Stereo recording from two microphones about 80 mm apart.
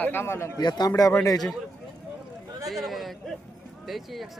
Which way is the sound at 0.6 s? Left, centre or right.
Left.